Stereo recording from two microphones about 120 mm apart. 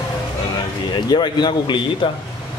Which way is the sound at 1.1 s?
35° left (ahead or behind).